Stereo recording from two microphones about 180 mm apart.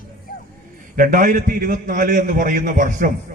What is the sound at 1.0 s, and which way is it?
A man's voice, 50° right (ahead or behind).